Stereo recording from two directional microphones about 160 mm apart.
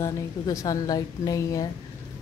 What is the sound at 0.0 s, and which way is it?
A woman's voice, 20° left (ahead or behind).